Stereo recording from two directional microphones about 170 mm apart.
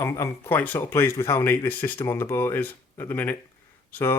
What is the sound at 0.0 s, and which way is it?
Speech, 15° left (ahead or behind).